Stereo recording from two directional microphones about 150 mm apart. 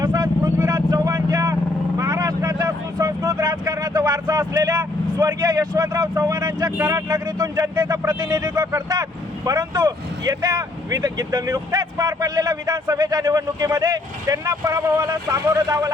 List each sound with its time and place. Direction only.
0.0 s vehicle: 25° right (ahead or behind)
6.7 s speech: 20° right (ahead or behind)